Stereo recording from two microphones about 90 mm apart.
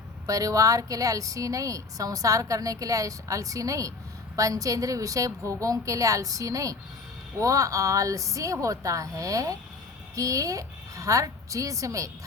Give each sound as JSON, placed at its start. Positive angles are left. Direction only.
{"t": 0.3, "sound": "a woman's voice", "side_deg": -40}